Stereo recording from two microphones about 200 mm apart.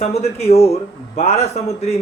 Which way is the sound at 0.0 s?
30° left (ahead or behind).